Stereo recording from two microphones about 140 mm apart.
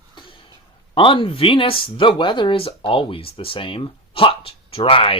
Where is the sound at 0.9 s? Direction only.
40° left (ahead or behind).